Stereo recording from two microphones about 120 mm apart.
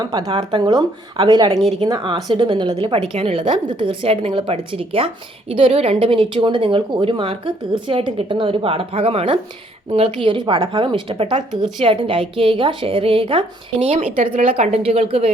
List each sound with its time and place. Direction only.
0.0 s a woman's voice: 35° right (ahead or behind); by 14.3 s 80° right
14.3 s a woman's voice: 60° right (ahead or behind)